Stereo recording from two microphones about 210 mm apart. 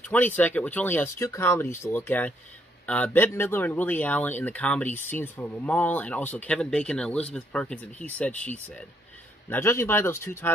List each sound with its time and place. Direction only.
0.0 s speech: 10° left (ahead or behind)